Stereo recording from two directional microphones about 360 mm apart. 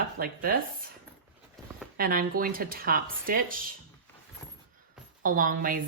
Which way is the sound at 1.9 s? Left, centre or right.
Right.